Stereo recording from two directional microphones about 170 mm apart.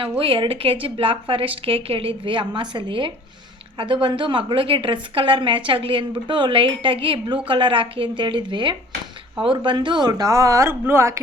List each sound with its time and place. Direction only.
0.2 s a woman's voice: 30° right (ahead or behind); by 11.2 s 15° right (ahead or behind)